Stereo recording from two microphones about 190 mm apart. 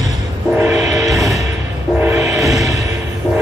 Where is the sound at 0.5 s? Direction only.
15° right (ahead or behind).